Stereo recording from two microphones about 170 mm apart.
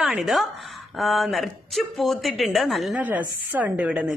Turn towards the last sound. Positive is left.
turn(degrees=-5)  # may be behind; listen again after turning